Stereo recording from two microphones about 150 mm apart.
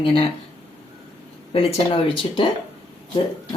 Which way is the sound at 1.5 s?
40° left (ahead or behind).